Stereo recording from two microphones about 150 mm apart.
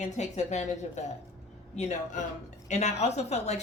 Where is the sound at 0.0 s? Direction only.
50° left (ahead or behind).